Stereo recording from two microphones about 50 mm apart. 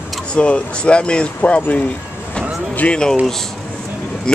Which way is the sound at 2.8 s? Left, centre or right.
Left.